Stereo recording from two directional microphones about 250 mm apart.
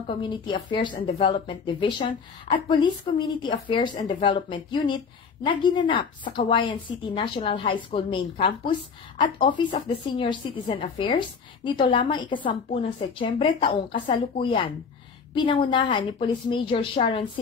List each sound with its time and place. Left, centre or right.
0.2 s a woman's voice: centre